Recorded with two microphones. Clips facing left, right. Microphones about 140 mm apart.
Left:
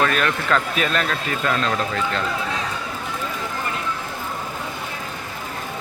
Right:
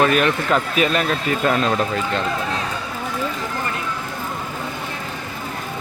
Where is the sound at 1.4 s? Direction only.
25° right (ahead or behind).